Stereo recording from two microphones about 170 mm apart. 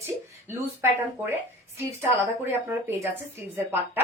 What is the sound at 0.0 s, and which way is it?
A woman's voice, 15° right (ahead or behind).